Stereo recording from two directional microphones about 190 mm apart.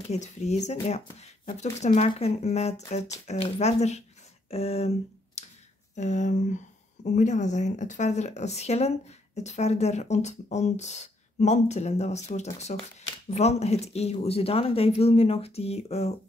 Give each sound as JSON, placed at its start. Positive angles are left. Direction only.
{"t": 0.1, "sound": "speech", "side_deg": 35}